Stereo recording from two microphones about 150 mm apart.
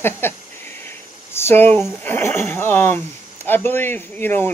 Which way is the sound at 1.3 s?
15° left (ahead or behind).